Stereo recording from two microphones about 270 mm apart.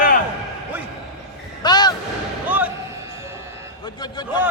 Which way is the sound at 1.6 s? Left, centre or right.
Centre.